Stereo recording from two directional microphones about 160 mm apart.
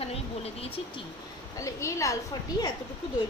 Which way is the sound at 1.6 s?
20° left (ahead or behind).